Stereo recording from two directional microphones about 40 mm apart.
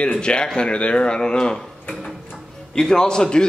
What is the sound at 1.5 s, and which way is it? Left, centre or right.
Speech, centre.